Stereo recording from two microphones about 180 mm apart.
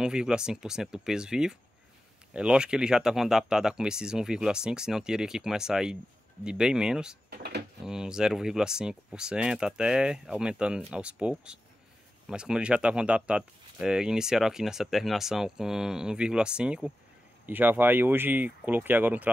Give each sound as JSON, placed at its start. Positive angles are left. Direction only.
{"t": 0.0, "sound": "speech", "side_deg": -5}
{"t": 7.2, "sound": "a sound", "side_deg": -65}
{"t": 7.8, "sound": "speech", "side_deg": -5}